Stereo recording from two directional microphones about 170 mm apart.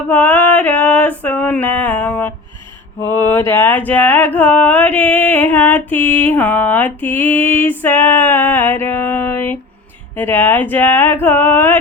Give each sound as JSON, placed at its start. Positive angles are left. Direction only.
{"t": 0.1, "sound": "mantra", "side_deg": 10}